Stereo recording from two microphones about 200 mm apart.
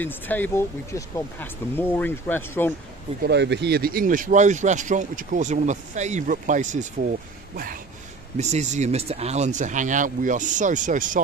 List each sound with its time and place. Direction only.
0.0 s speech: 10° left (ahead or behind)
3.2 s speech: 55° right (ahead or behind)
8.4 s speech: 35° right (ahead or behind)